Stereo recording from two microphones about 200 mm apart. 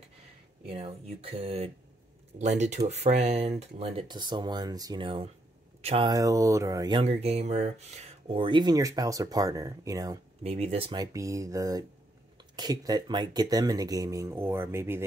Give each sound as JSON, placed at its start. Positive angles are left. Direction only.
{"t": 0.7, "sound": "speech", "side_deg": -30}
{"t": 4.1, "sound": "speech", "side_deg": -20}
{"t": 10.4, "sound": "speech", "side_deg": -30}